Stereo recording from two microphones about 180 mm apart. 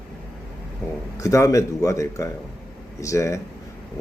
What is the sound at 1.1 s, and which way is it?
A man's voice, 15° left (ahead or behind).